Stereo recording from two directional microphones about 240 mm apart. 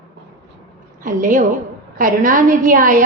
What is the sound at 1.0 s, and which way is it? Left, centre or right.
A woman's voice, right.